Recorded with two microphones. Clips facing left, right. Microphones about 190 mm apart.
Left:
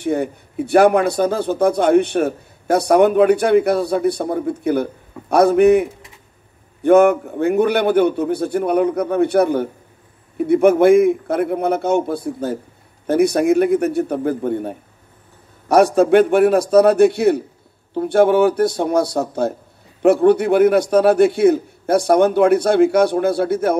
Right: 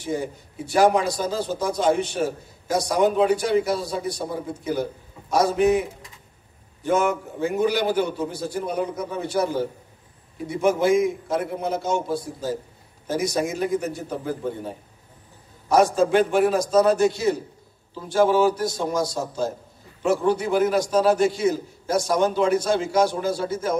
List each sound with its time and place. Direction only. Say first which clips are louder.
0.0 s a man's voice: left 7 dB; 60° left (ahead or behind)